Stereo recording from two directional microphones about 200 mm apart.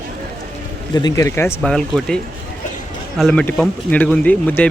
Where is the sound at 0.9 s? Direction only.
15° left (ahead or behind).